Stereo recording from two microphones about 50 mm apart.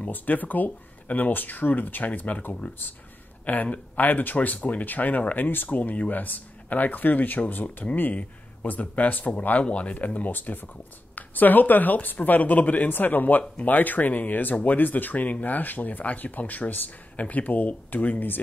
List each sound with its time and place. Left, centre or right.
0.1 s speech: left